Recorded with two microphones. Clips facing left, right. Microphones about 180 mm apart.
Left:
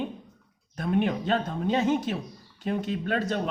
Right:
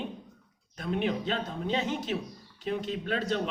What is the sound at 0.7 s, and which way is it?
Speech, 50° left (ahead or behind).